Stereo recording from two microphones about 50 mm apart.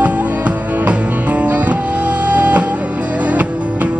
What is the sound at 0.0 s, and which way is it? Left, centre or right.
Music, right.